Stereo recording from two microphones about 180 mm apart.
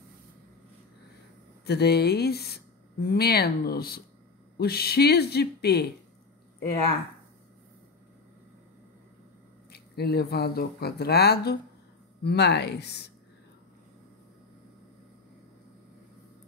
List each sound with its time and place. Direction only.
1.7 s speech: 65° left (ahead or behind)
9.7 s speech: 60° left (ahead or behind)